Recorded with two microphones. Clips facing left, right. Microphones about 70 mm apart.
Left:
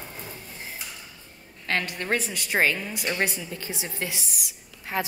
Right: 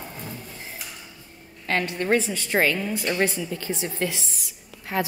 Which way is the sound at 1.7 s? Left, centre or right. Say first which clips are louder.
Right 4 dB; centre.